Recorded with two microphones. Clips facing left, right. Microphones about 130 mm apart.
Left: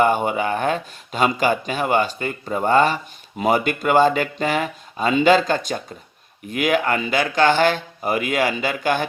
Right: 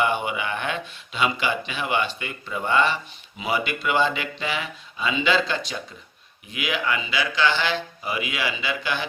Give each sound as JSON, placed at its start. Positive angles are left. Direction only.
{"t": 0.0, "sound": "speech", "side_deg": 45}